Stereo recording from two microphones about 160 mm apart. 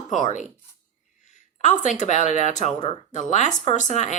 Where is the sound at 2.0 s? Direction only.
45° left (ahead or behind).